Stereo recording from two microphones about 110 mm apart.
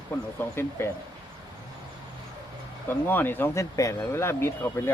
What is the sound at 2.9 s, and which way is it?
Speech, 20° left (ahead or behind).